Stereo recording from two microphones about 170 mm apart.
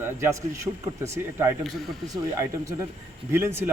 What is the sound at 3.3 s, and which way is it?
Speech, 15° right (ahead or behind).